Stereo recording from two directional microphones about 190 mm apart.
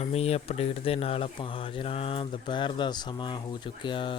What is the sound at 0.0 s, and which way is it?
Speech, 30° left (ahead or behind).